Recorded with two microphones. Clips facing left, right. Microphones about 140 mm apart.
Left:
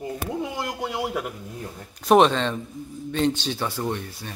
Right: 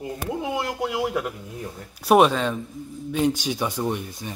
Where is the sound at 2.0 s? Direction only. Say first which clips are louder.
Even; 10° right (ahead or behind).